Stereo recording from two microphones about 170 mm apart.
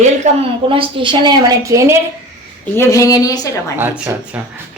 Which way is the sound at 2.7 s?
15° left (ahead or behind).